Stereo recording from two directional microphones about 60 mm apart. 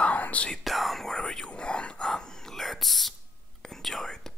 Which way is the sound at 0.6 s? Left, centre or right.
Centre.